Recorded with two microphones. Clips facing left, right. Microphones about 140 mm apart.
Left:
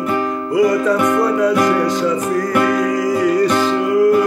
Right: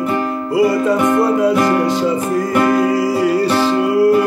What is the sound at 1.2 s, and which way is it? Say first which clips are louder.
Music: right 1 dB; 25° right (ahead or behind).